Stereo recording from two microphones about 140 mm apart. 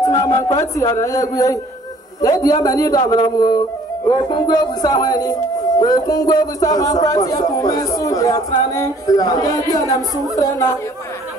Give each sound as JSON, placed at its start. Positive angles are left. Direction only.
{"t": 0.0, "sound": "speech", "side_deg": 25}